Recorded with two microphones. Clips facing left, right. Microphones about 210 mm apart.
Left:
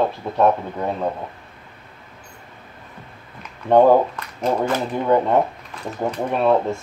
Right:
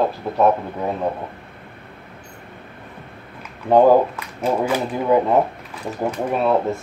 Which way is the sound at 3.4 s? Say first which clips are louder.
Even; 5° right (ahead or behind).